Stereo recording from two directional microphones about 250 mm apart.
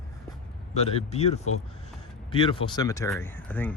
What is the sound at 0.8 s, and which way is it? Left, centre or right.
Speech, left.